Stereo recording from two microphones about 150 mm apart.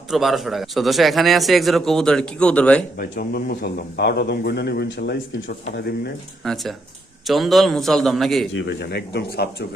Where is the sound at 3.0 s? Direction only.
80° left.